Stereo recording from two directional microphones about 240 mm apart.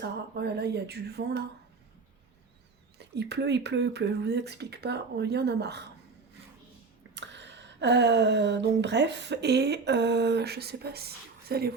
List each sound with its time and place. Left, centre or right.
0.0 s speech: right
3.0 s speech: right
7.1 s speech: right